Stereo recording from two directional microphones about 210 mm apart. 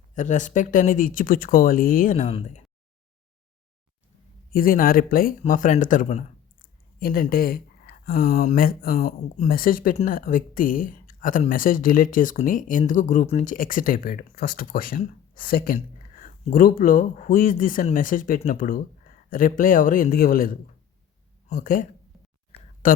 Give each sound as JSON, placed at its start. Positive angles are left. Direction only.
{"t": 0.1, "sound": "speech", "side_deg": 35}
{"t": 4.5, "sound": "speech", "side_deg": 45}